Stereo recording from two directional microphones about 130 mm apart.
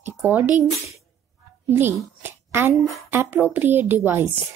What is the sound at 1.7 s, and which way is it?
A woman's voice, 15° right (ahead or behind).